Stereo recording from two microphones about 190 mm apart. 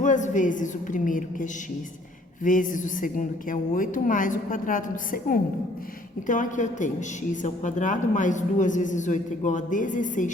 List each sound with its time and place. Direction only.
0.0 s a man's voice: 40° left (ahead or behind)